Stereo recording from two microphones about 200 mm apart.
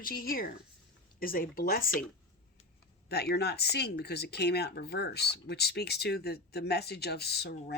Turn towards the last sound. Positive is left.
turn(degrees=55)  # may be behind; listen again after turning